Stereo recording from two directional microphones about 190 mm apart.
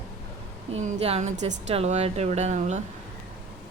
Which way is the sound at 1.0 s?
35° right (ahead or behind).